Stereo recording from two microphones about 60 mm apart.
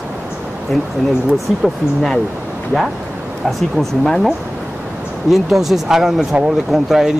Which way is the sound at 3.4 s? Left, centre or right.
Centre.